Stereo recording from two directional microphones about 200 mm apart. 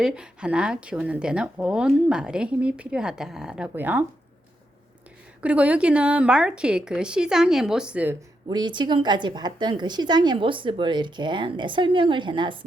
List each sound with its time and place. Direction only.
0.0 s speech: 5° right (ahead or behind)
5.4 s speech: 5° right (ahead or behind)
8.4 s a woman's voice: 20° right (ahead or behind)